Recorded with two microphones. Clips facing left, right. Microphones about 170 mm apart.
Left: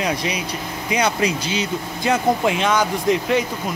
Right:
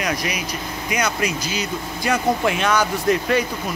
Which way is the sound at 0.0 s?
30° left (ahead or behind).